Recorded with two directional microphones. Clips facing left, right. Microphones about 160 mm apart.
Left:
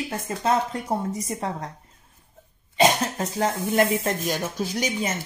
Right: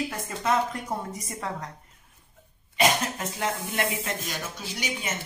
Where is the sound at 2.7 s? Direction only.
35° left (ahead or behind).